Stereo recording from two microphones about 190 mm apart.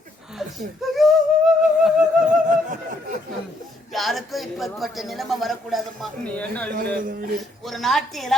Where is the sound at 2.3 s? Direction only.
45° right (ahead or behind).